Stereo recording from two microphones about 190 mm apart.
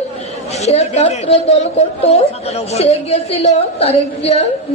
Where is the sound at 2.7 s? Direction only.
30° left (ahead or behind).